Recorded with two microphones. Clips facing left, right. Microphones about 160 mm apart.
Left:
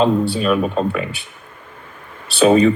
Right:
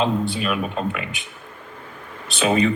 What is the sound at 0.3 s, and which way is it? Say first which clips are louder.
Speech: left 7 dB; 40° left (ahead or behind).